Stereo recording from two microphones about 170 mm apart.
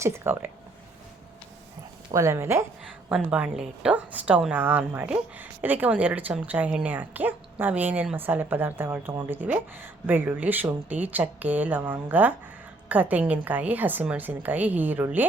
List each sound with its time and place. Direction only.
0.0 s a woman's voice: 15° right (ahead or behind)
2.1 s a woman's voice: 15° right (ahead or behind)